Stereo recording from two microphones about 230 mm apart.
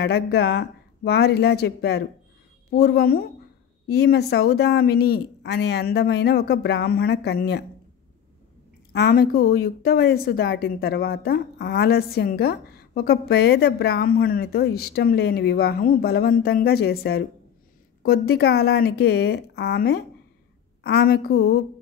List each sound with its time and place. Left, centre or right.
0.0 s a woman's voice: left
8.9 s a woman's voice: left